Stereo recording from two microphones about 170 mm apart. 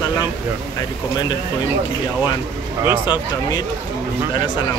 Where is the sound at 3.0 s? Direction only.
25° left (ahead or behind).